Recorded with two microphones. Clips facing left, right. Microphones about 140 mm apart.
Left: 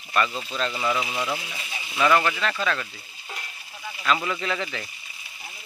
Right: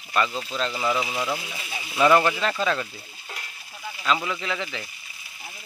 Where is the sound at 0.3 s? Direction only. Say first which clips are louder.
Right 1 dB; centre (ahead or behind).